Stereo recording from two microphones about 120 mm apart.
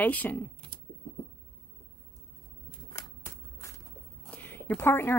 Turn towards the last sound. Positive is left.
turn(degrees=20)  # may be behind; listen again after turning